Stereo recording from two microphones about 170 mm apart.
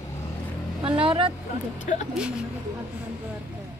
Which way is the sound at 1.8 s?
45° left (ahead or behind).